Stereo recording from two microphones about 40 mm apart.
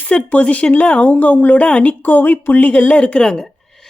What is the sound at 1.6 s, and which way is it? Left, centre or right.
Speech, left.